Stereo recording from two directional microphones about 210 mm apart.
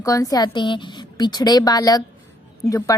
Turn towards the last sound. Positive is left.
turn(degrees=15)  # may be behind; listen again after turning